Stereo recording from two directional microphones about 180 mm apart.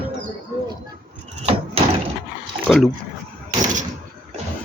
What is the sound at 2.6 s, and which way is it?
Speech, centre (ahead or behind).